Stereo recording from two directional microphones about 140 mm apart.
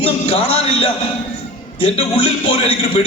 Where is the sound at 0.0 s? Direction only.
45° left (ahead or behind).